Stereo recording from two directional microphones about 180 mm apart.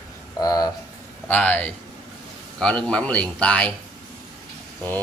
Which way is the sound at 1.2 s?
10° left (ahead or behind).